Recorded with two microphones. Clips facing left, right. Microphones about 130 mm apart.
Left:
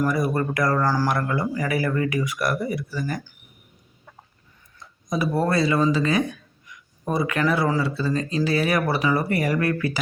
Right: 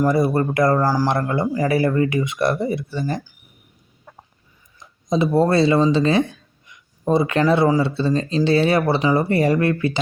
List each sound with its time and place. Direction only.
0.0 s speech: 25° right (ahead or behind)
4.8 s speech: 25° right (ahead or behind)